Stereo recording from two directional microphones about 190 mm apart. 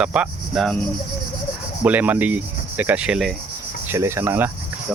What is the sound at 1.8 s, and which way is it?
Speech, 10° right (ahead or behind).